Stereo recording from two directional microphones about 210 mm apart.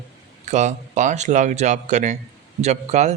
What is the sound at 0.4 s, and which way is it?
Speech, 35° right (ahead or behind).